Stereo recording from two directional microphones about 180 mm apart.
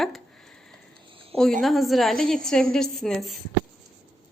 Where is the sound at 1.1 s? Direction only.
30° right (ahead or behind).